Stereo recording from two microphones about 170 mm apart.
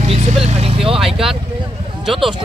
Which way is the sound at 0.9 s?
Centre (ahead or behind).